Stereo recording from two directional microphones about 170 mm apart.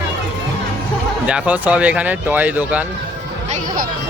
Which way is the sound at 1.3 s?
10° right (ahead or behind).